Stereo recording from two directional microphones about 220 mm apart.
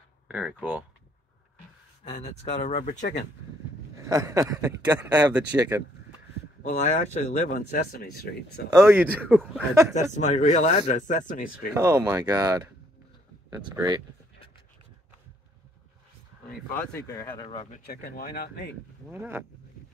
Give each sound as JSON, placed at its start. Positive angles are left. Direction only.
{"t": 0.3, "sound": "speech", "side_deg": -5}
{"t": 2.0, "sound": "speech", "side_deg": 30}
{"t": 3.9, "sound": "speech", "side_deg": -15}
{"t": 6.6, "sound": "speech", "side_deg": 35}
{"t": 8.7, "sound": "speech", "side_deg": -10}
{"t": 10.1, "sound": "speech", "side_deg": 35}
{"t": 11.7, "sound": "speech", "side_deg": -15}
{"t": 16.9, "sound": "speech", "side_deg": 15}
{"t": 17.6, "sound": "speech", "side_deg": 40}
{"t": 19.0, "sound": "speech", "side_deg": -10}